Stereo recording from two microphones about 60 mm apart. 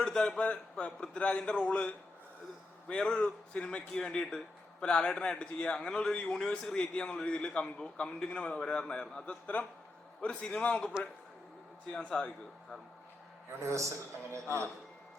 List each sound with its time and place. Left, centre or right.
0.0 s a man's voice: centre
11.9 s a man's voice: centre
13.6 s a man's voice: right